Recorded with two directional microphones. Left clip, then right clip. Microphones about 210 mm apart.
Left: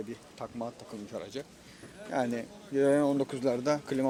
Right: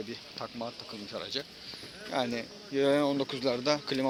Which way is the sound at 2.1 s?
20° left (ahead or behind).